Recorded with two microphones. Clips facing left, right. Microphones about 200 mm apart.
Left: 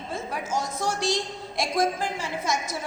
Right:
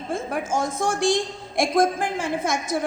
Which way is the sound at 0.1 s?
50° right (ahead or behind).